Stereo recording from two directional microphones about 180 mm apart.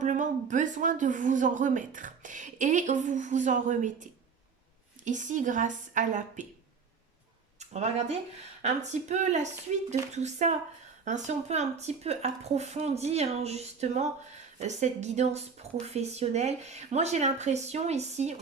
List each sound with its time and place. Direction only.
0.0 s a woman's voice: 45° right (ahead or behind)
7.6 s speech: 40° right (ahead or behind)